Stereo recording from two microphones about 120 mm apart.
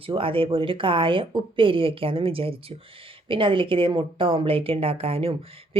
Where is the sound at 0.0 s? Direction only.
50° right (ahead or behind).